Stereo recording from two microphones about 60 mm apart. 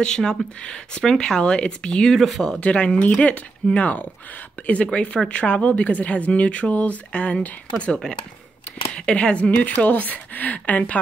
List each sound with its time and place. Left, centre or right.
0.0 s speech: centre
2.6 s speech: centre